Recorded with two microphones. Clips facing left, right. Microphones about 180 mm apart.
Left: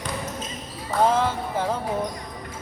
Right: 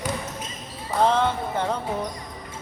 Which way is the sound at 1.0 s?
5° left (ahead or behind).